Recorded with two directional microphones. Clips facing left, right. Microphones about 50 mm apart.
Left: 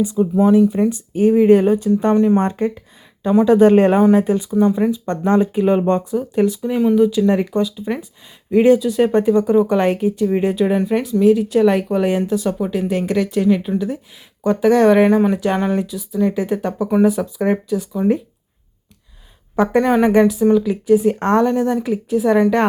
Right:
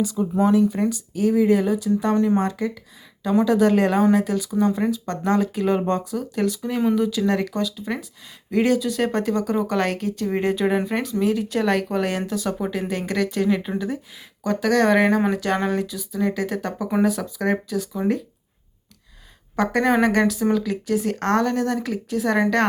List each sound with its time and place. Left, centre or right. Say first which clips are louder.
0.0 s speech: left 5 dB; left
1.5 s speech: left 7 dB; left; by 10.2 s centre
10.2 s speech: left 3 dB; centre
19.5 s speech: left 4 dB; centre